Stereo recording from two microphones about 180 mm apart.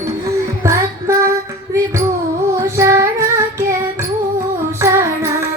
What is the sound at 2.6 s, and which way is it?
Music, 15° right (ahead or behind).